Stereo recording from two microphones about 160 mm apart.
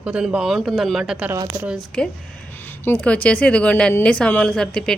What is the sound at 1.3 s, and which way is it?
Speech, 20° right (ahead or behind).